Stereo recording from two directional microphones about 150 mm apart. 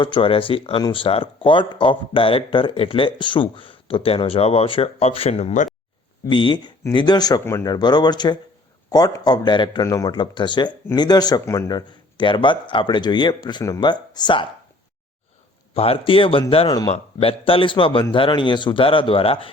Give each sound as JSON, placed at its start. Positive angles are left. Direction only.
{"t": 0.0, "sound": "speech", "side_deg": 35}
{"t": 6.2, "sound": "speech", "side_deg": 30}
{"t": 10.2, "sound": "speech", "side_deg": 30}
{"t": 15.7, "sound": "speech", "side_deg": 40}